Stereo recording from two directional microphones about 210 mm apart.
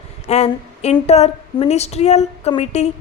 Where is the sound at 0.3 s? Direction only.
30° left (ahead or behind).